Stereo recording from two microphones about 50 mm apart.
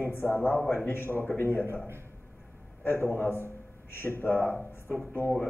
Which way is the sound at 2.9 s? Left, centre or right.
Left.